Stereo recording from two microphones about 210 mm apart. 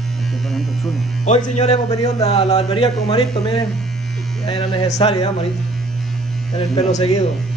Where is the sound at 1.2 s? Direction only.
35° left (ahead or behind).